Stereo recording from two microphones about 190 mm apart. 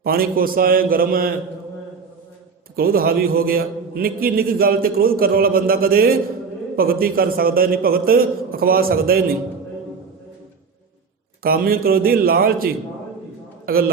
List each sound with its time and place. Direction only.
0.0 s a man's voice: 50° right (ahead or behind)
2.7 s a man's voice: 50° right (ahead or behind)
11.4 s a man's voice: 50° right (ahead or behind)